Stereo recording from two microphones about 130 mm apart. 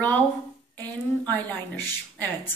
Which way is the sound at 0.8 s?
10° left (ahead or behind).